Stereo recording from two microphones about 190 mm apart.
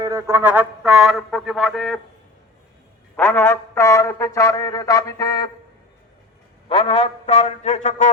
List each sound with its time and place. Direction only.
0.0 s speech: 15° right (ahead or behind); by 2.0 s centre (ahead or behind)
3.2 s a sound: 10° left (ahead or behind)
6.7 s a man's voice: 30° left (ahead or behind)